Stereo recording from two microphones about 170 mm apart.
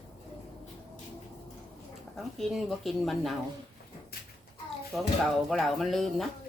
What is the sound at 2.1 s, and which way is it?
Speech, centre (ahead or behind).